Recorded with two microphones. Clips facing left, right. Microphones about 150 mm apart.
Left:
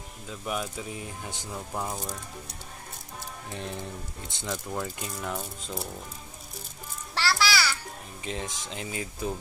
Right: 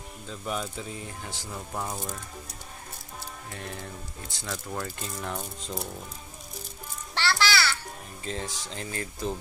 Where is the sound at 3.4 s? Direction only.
20° left (ahead or behind).